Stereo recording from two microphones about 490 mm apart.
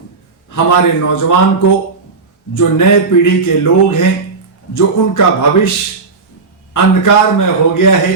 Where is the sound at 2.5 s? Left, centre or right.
Left.